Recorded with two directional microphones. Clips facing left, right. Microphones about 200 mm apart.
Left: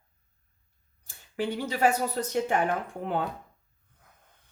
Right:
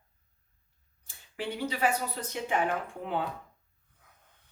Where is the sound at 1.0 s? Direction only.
45° left (ahead or behind).